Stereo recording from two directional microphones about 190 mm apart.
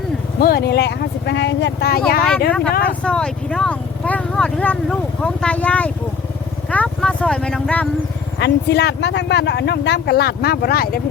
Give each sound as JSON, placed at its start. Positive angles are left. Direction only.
{"t": 0.3, "sound": "speech", "side_deg": 55}
{"t": 2.5, "sound": "speech", "side_deg": 5}
{"t": 8.4, "sound": "speech", "side_deg": 60}